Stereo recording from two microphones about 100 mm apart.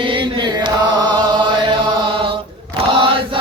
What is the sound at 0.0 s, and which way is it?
Chant, 55° right (ahead or behind).